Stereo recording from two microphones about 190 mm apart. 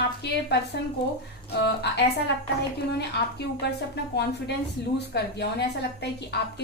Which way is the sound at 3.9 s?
60° left (ahead or behind).